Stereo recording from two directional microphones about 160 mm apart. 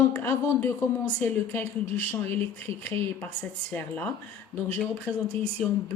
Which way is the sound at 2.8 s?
10° left (ahead or behind).